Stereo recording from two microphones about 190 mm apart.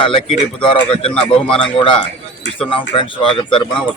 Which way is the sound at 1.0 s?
30° left (ahead or behind).